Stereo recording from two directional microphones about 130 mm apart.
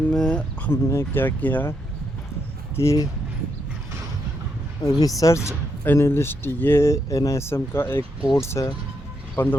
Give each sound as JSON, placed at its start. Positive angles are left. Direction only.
{"t": 0.1, "sound": "speech", "side_deg": 5}
{"t": 2.7, "sound": "speech", "side_deg": 25}
{"t": 4.8, "sound": "speech", "side_deg": 25}